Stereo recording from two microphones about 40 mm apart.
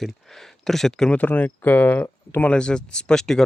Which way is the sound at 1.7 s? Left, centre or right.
Left.